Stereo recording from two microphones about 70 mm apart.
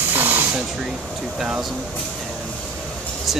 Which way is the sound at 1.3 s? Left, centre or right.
Centre.